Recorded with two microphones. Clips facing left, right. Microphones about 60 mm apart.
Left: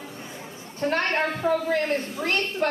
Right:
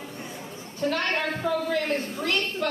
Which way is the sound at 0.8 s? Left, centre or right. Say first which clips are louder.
Left 2 dB; left.